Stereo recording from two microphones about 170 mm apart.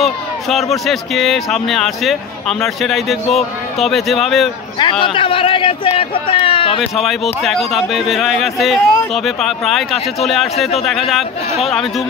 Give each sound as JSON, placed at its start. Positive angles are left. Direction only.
{"t": 0.0, "sound": "speech", "side_deg": 0}
{"t": 4.7, "sound": "a man's voice", "side_deg": 30}
{"t": 7.4, "sound": "speech", "side_deg": 0}